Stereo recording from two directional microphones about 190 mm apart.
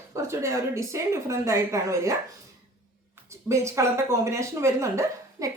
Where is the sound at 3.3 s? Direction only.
15° right (ahead or behind).